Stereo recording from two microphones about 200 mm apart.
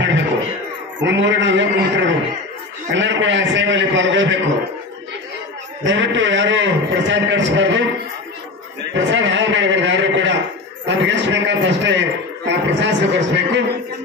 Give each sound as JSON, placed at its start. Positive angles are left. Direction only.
{"t": 1.0, "sound": "a man's voice", "side_deg": -65}
{"t": 5.9, "sound": "a man's voice", "side_deg": -65}
{"t": 8.9, "sound": "a man's voice", "side_deg": -65}